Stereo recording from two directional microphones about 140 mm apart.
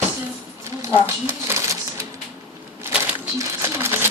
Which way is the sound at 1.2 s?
20° right (ahead or behind).